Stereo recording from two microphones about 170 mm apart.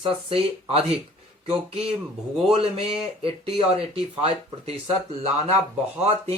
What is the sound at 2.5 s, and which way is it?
Speech, 35° right (ahead or behind).